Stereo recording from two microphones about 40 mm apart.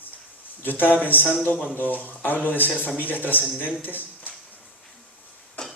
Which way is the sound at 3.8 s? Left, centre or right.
Left.